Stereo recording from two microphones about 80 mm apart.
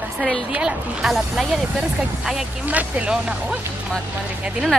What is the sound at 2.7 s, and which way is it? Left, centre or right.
Speech, centre.